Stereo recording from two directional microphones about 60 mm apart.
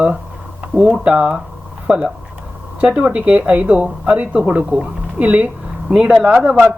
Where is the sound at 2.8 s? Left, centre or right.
Right.